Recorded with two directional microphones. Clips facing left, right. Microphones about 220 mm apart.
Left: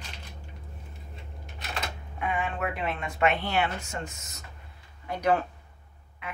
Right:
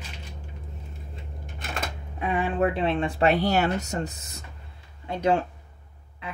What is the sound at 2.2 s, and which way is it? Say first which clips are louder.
Speech: right 6 dB; 35° right (ahead or behind).